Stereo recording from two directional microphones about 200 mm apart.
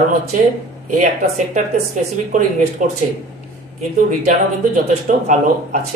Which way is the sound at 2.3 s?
40° right (ahead or behind).